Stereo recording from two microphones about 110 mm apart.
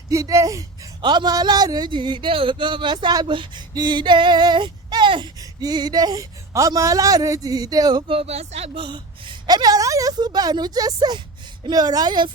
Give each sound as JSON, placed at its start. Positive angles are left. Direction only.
{"t": 0.1, "sound": "speech", "side_deg": -30}
{"t": 1.0, "sound": "speech", "side_deg": -40}
{"t": 8.0, "sound": "speech", "side_deg": -60}
{"t": 8.8, "sound": "speech", "side_deg": -50}